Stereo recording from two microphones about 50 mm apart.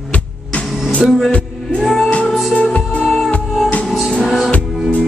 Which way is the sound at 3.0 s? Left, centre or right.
Centre.